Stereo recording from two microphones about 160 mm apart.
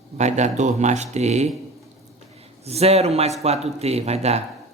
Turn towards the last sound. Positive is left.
turn(degrees=-40)  # may be behind; listen again after turning